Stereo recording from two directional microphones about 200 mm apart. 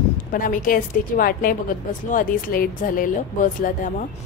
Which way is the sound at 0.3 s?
40° left (ahead or behind).